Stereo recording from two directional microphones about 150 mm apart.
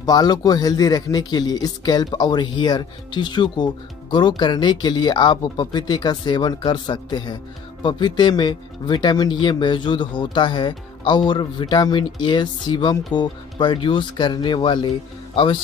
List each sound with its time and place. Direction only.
0.0 s speech: 25° left (ahead or behind)